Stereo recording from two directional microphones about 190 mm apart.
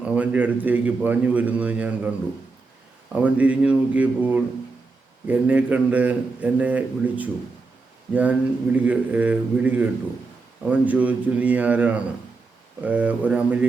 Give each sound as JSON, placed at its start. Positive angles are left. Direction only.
{"t": 0.0, "sound": "a man's voice", "side_deg": -5}
{"t": 3.2, "sound": "a man's voice", "side_deg": -5}